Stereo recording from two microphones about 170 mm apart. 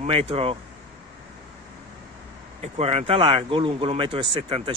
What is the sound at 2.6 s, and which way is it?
Speech, 40° right (ahead or behind).